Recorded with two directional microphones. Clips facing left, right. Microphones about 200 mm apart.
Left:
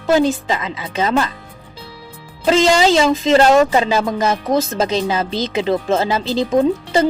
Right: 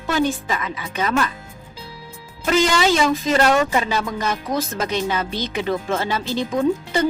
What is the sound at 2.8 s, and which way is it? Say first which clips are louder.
Speech: left 4 dB; 30° left (ahead or behind).